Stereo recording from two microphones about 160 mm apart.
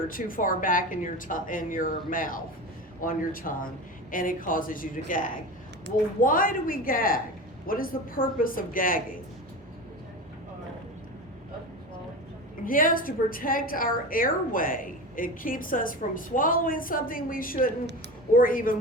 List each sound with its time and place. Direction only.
0.1 s a woman's voice: 60° left (ahead or behind)
12.6 s a woman's voice: 60° left (ahead or behind)